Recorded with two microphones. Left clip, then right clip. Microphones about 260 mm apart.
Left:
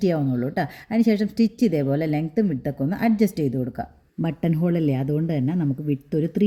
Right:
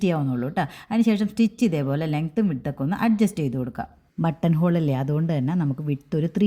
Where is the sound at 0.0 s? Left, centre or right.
Centre.